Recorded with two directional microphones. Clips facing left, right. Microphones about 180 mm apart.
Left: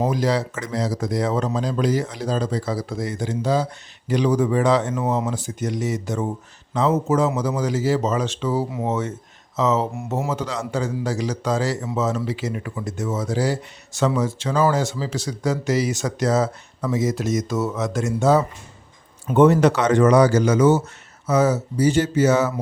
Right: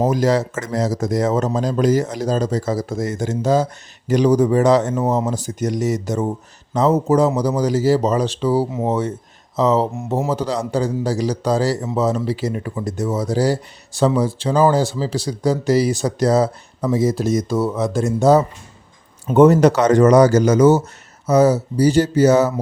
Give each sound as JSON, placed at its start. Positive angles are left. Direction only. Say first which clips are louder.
{"t": 0.0, "sound": "speech", "louder": "right 4 dB", "side_deg": -45}
{"t": 9.9, "sound": "speech", "louder": "right 4 dB", "side_deg": -20}
{"t": 10.2, "sound": "speech", "louder": "right 5 dB", "side_deg": -35}